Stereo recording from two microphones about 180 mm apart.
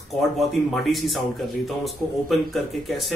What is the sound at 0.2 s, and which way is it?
Speech, centre (ahead or behind).